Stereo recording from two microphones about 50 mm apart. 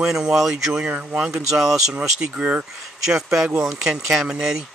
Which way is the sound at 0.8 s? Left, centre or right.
Right.